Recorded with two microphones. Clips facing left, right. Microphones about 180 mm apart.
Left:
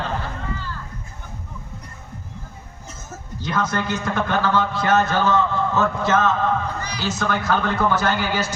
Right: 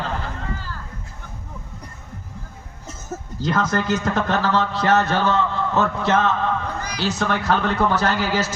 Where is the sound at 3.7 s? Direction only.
45° right (ahead or behind).